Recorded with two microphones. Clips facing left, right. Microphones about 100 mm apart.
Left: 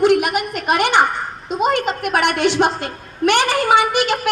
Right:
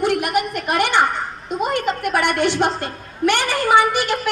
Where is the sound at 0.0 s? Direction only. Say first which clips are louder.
Left 4 dB; 90° left.